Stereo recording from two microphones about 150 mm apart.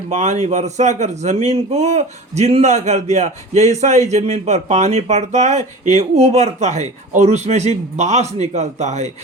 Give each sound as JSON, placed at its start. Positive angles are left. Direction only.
{"t": 0.1, "sound": "speech", "side_deg": -50}